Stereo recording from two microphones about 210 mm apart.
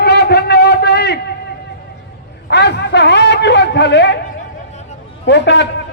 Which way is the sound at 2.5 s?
55° left (ahead or behind).